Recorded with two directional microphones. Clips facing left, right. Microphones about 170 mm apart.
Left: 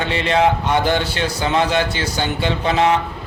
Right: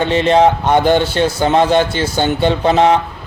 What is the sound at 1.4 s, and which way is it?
Speech, 35° right (ahead or behind).